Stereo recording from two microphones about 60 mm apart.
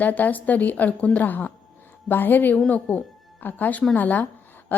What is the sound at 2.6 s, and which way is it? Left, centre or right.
A woman's voice, left.